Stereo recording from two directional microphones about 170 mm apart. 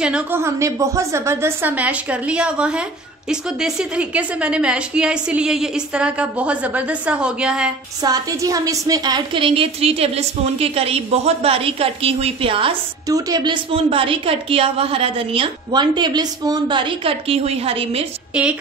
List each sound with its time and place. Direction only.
0.0 s a woman's voice: 10° right (ahead or behind)
8.0 s a woman's voice: 20° right (ahead or behind)
18.3 s a woman's voice: 5° right (ahead or behind)